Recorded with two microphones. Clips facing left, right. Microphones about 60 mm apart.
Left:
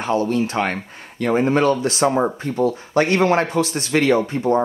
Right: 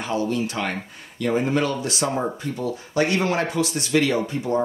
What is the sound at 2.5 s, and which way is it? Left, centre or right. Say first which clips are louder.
Speech: left 9 dB; left.